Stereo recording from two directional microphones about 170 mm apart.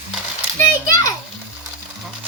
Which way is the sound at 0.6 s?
20° left (ahead or behind).